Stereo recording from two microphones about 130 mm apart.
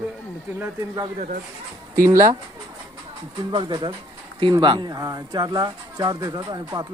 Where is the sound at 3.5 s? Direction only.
35° right (ahead or behind).